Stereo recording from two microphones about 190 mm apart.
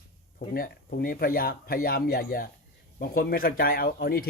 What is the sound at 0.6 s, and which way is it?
Speech, 50° left (ahead or behind).